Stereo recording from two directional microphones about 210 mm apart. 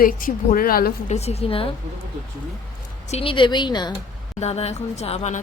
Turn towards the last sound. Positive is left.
turn(degrees=30)  # may be behind; listen again after turning